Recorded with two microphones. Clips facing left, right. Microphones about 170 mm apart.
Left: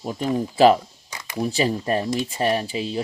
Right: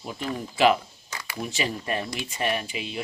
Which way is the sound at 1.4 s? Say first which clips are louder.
Left 8 dB; 35° left (ahead or behind).